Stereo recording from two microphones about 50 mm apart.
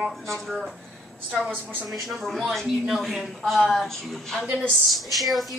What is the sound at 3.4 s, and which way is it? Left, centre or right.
A woman's voice, centre.